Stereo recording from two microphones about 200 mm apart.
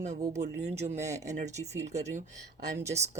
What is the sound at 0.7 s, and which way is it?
Speech, 35° right (ahead or behind).